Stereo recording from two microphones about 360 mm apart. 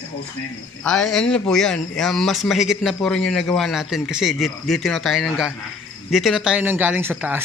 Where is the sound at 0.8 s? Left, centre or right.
Centre.